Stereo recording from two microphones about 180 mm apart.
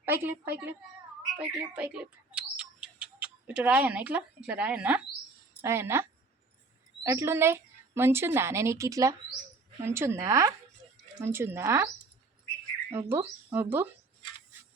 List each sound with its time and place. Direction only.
0.0 s a woman's voice: 10° right (ahead or behind)
12.9 s a woman's voice: 15° right (ahead or behind)